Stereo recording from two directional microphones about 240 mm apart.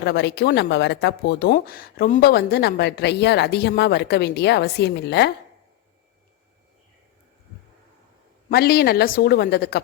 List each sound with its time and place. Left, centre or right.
0.0 s speech: left
8.4 s a woman's voice: left